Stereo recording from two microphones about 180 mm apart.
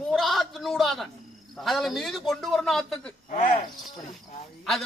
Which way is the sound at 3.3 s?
30° left (ahead or behind).